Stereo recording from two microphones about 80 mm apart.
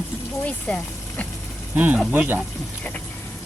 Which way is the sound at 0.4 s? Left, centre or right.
Centre.